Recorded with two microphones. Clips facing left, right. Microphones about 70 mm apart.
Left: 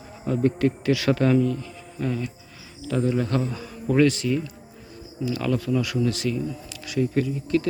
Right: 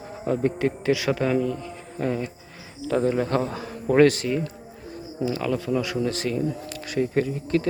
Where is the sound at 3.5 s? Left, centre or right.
Right.